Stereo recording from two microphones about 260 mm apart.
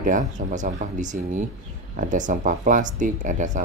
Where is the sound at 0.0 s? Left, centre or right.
Right.